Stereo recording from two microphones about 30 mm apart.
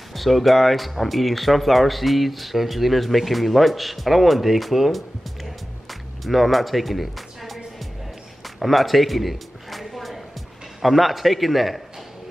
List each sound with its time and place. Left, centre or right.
0.1 s speech: centre
8.5 s a sound: centre
10.8 s a man's voice: centre